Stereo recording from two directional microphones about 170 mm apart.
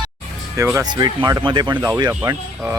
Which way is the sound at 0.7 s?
25° right (ahead or behind).